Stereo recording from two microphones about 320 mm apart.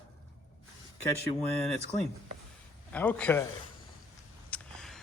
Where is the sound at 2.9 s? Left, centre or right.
Centre.